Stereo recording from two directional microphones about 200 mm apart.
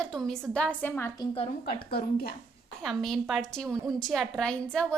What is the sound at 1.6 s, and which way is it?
Speech, 50° left (ahead or behind).